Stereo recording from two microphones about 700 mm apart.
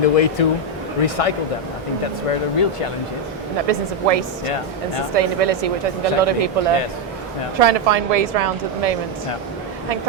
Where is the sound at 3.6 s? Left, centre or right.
Right.